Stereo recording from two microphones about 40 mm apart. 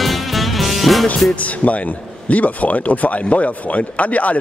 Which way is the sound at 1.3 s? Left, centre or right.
Left.